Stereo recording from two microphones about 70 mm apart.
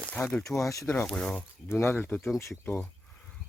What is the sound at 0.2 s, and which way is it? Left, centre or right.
Speech, left.